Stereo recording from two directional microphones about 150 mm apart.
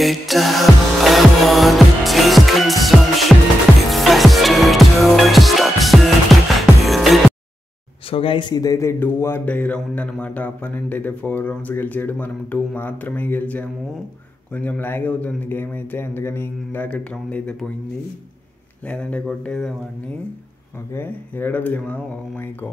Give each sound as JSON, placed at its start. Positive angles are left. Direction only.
{"t": 0.0, "sound": "music", "side_deg": 0}
{"t": 8.1, "sound": "speech", "side_deg": 40}
{"t": 18.9, "sound": "speech", "side_deg": 10}
{"t": 20.9, "sound": "speech", "side_deg": 15}